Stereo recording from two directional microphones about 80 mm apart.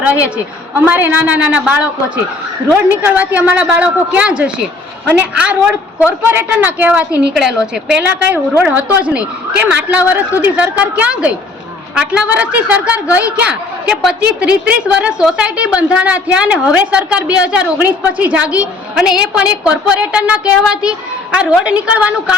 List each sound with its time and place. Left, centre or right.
0.0 s a woman's voice: centre
3.2 s a woman's voice: centre
6.1 s a woman's voice: right; by 8.0 s centre
8.3 s a woman's voice: right